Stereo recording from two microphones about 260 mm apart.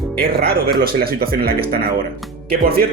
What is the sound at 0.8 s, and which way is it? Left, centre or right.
Speech, right.